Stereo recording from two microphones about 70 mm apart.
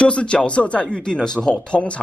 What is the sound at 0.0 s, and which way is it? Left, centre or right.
Speech, centre.